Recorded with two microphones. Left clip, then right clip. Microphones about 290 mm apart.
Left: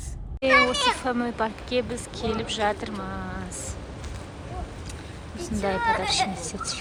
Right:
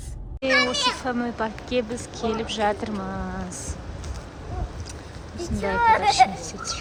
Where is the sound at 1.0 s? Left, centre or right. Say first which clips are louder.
Even; centre.